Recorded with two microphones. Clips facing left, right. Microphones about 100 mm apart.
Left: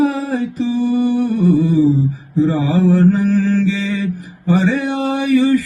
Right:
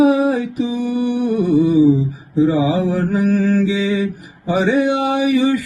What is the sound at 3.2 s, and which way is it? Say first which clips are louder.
Mantra: even; 20° right (ahead or behind).